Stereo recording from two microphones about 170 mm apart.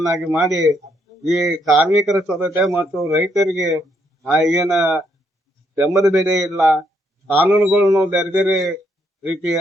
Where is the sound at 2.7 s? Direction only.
Centre (ahead or behind).